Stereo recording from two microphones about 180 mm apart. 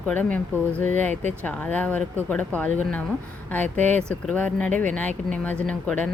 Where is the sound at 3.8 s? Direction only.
5° left (ahead or behind).